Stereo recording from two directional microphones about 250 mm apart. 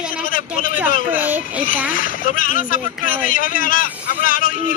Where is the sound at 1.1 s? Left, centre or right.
Centre.